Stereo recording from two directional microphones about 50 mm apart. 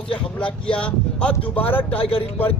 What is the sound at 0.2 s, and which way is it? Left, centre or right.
Speech, left.